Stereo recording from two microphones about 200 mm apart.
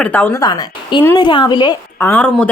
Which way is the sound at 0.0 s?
10° left (ahead or behind).